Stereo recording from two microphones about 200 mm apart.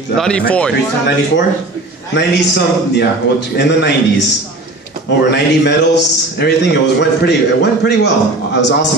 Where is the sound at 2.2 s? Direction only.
55° left (ahead or behind).